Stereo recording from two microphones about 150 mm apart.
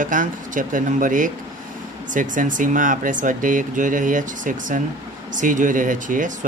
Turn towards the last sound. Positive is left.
turn(degrees=-60)  # may be behind; listen again after turning